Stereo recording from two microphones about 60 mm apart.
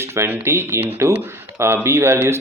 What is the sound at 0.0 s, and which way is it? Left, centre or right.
Speech, right.